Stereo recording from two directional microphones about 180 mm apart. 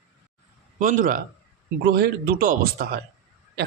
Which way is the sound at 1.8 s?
60° right (ahead or behind).